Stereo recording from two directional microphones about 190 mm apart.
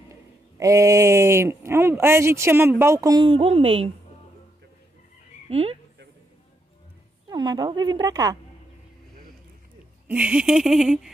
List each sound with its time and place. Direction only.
0.6 s a woman's voice: 15° right (ahead or behind)
5.5 s speech: 30° right (ahead or behind)
7.2 s a woman's voice: 20° right (ahead or behind)
10.0 s a sound: 5° right (ahead or behind)